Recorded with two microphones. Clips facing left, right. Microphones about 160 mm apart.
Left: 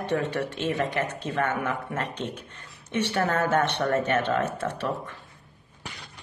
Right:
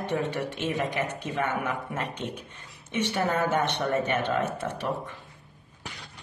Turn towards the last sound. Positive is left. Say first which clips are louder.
# left 1 dB
turn(degrees=-15)  # may be behind; listen again after turning